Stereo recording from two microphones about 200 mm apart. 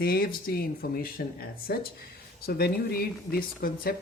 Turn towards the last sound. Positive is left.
turn(degrees=50)  # may be behind; listen again after turning